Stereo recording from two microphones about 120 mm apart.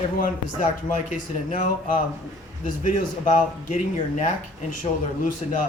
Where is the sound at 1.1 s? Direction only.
90° left.